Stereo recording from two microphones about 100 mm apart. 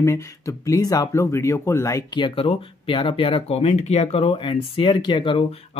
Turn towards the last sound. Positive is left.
turn(degrees=55)  # may be behind; listen again after turning